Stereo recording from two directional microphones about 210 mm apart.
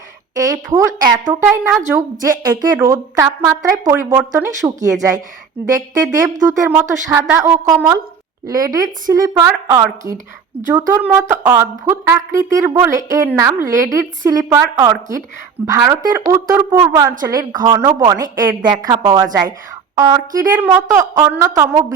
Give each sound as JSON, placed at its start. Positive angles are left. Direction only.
{"t": 0.3, "sound": "a woman's voice", "side_deg": -15}